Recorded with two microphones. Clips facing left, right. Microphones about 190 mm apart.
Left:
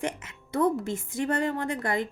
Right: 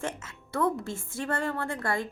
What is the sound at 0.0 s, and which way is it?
A woman's voice, 15° left (ahead or behind).